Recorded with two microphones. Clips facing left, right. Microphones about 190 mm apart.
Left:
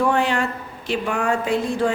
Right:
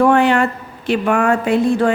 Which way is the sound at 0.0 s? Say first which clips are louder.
Right 7 dB; 60° right (ahead or behind).